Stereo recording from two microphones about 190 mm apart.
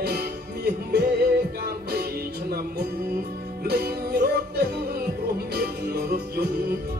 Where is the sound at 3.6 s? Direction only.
55° right (ahead or behind).